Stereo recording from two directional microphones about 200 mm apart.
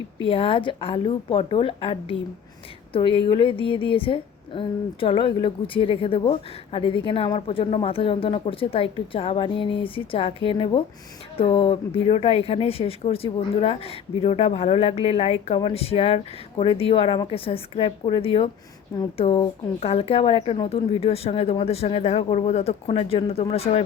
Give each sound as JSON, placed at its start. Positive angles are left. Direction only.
{"t": 0.3, "sound": "a woman's voice", "side_deg": 30}